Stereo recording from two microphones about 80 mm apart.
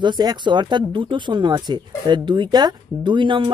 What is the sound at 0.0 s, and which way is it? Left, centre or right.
Speech, right.